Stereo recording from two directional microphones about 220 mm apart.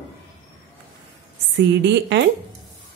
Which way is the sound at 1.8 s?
55° right (ahead or behind).